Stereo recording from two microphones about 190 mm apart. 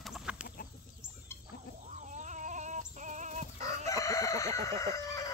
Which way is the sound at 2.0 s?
40° right (ahead or behind).